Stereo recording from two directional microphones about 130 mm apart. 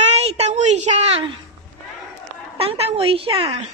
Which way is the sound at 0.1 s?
55° right (ahead or behind).